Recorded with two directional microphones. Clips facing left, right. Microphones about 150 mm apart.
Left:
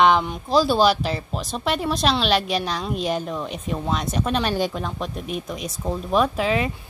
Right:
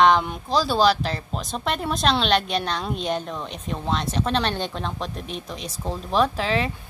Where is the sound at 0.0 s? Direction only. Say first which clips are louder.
Even; centre (ahead or behind).